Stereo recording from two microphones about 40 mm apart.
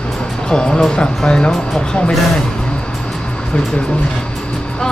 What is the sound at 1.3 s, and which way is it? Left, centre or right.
Speech, left.